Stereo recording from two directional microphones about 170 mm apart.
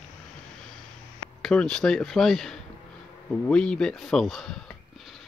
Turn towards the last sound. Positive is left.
turn(degrees=0)  # may be behind; listen again after turning